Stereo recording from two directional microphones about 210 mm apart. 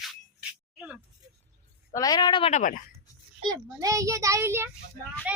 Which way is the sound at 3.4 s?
15° right (ahead or behind).